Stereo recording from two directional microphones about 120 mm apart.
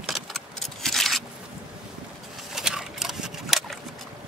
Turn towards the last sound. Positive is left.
turn(degrees=0)  # may be behind; listen again after turning